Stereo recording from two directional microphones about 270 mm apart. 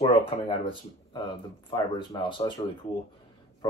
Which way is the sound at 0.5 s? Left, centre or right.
Centre.